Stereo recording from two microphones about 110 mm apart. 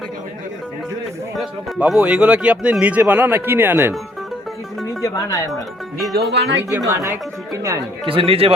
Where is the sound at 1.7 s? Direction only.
10° right (ahead or behind).